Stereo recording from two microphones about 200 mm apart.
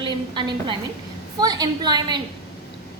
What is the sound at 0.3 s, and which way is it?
A woman's voice, 25° right (ahead or behind).